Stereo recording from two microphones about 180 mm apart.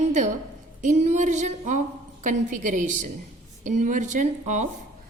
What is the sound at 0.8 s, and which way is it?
A woman's voice, 40° right (ahead or behind).